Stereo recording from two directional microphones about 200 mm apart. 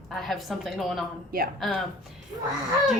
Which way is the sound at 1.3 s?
45° right (ahead or behind).